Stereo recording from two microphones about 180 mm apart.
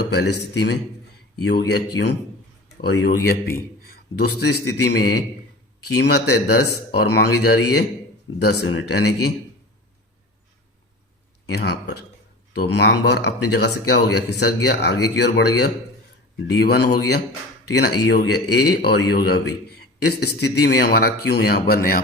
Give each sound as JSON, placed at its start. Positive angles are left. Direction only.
{"t": 0.0, "sound": "speech", "side_deg": 70}
{"t": 3.1, "sound": "speech", "side_deg": 55}
{"t": 5.9, "sound": "speech", "side_deg": 65}
{"t": 11.4, "sound": "speech", "side_deg": 65}